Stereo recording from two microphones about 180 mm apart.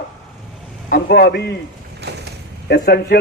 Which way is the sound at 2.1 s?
65° right (ahead or behind).